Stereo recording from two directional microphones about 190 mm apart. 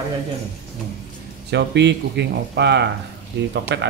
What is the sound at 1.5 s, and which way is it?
Speech, 65° right (ahead or behind).